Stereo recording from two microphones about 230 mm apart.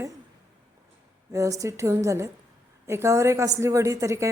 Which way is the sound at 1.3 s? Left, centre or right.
Centre.